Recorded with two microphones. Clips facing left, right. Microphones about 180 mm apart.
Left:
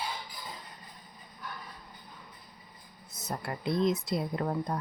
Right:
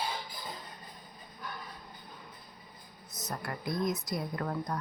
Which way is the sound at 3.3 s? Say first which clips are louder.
Left 4 dB; 25° left (ahead or behind).